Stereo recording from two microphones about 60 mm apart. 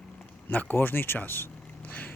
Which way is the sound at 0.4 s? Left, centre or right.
Left.